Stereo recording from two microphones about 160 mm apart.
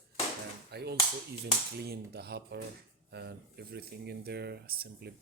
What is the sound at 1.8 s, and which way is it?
Speech, 80° right.